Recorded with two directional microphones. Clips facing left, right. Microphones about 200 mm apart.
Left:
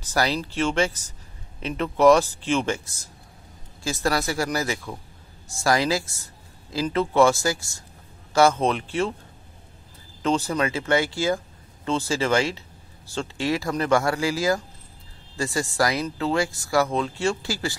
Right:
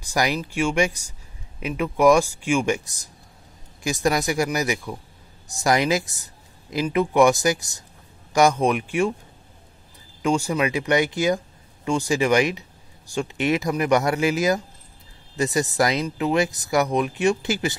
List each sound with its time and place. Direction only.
0.0 s speech: 15° right (ahead or behind)
10.2 s speech: 10° right (ahead or behind)